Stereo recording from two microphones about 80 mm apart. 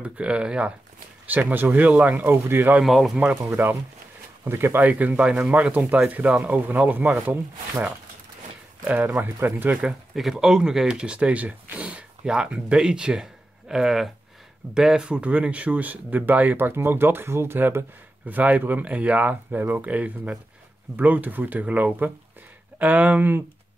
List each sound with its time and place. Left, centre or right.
0.0 s speech: centre
2.8 s speech: centre
3.4 s speech: right
8.8 s speech: centre
9.8 s speech: centre; by 23.4 s right